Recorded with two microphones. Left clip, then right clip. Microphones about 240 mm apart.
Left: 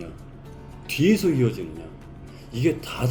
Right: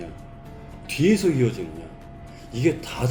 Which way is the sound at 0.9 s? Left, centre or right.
Centre.